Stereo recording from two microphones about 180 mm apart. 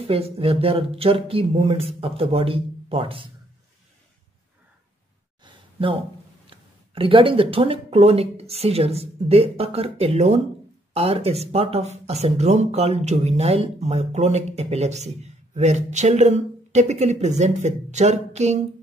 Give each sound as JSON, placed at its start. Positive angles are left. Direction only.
{"t": 0.0, "sound": "speech", "side_deg": -30}
{"t": 5.4, "sound": "a sound", "side_deg": -30}
{"t": 6.5, "sound": "speech", "side_deg": -30}